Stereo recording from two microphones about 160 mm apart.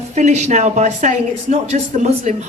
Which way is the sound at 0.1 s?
45° right (ahead or behind).